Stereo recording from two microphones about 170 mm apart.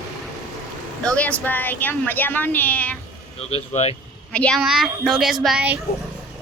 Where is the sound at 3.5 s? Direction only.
40° left (ahead or behind).